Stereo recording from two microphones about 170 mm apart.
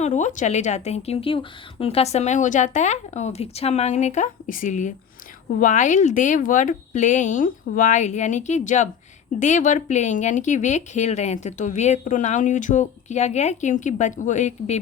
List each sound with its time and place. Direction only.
0.0 s speech: 45° left (ahead or behind)